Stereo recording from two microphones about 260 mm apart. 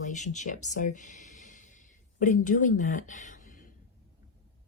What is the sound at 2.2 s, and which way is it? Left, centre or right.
A woman's voice, left.